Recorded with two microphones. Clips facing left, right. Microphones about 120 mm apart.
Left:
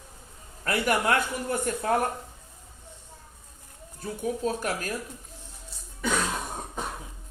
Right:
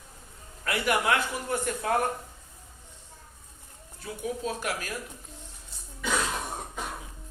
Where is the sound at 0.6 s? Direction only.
40° left (ahead or behind).